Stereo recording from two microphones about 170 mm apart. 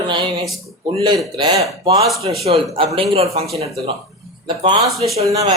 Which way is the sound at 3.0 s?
35° right (ahead or behind).